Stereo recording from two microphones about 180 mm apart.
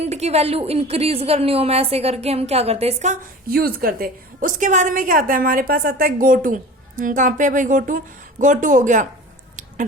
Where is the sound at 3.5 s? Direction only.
55° right (ahead or behind).